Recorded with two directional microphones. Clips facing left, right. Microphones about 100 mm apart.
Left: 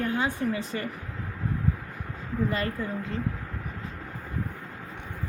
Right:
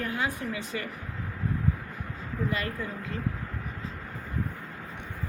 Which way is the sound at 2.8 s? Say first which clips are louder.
Left 3 dB; 30° left (ahead or behind).